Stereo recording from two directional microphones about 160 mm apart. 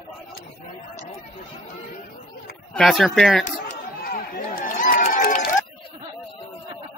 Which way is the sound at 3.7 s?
70° left (ahead or behind).